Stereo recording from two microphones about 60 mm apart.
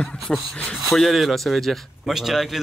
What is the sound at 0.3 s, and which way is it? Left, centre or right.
Speech, centre.